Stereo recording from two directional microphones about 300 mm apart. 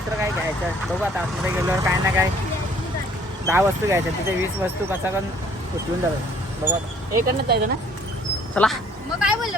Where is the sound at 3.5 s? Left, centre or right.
Centre.